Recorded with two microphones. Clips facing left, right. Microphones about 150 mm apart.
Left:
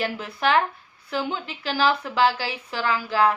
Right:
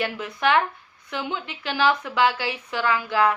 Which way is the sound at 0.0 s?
30° left (ahead or behind).